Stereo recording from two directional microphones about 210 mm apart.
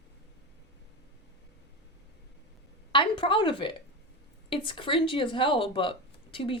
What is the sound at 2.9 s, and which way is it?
Speech, 25° left (ahead or behind).